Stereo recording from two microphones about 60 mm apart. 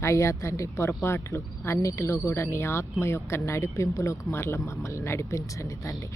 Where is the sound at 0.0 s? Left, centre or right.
Left.